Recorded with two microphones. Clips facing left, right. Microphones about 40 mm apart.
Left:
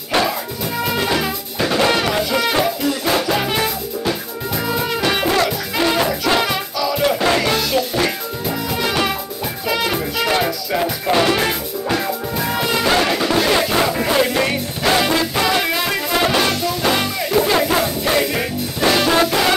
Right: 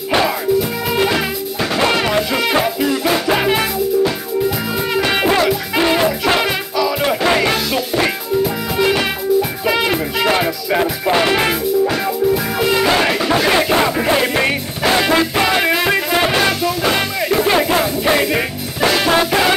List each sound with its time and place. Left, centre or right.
1.0 s music: centre
4.9 s music: centre
12.5 s music: centre